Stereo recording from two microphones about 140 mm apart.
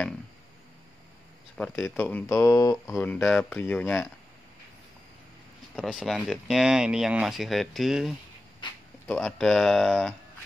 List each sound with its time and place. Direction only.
1.6 s speech: 15° left (ahead or behind)
3.0 s speech: 10° left (ahead or behind)
5.8 s speech: centre (ahead or behind)
8.6 s speech: 35° left (ahead or behind)
9.0 s speech: 5° left (ahead or behind)